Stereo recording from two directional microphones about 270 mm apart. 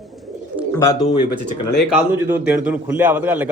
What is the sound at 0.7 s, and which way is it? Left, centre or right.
Speech, centre.